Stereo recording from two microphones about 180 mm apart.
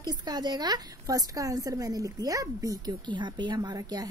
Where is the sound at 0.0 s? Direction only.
25° right (ahead or behind).